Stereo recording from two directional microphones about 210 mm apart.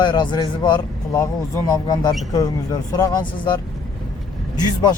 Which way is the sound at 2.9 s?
15° left (ahead or behind).